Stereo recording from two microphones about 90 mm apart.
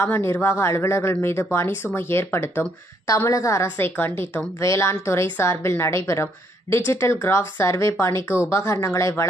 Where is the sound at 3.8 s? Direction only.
25° left (ahead or behind).